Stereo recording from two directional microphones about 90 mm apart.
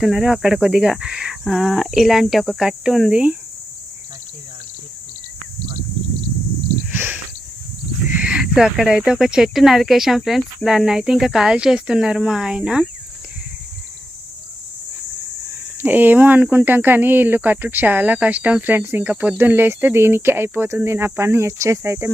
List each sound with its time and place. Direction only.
0.0 s speech: 5° right (ahead or behind)
6.9 s a sound: 20° right (ahead or behind)
8.1 s speech: 10° right (ahead or behind)
15.8 s speech: 20° right (ahead or behind)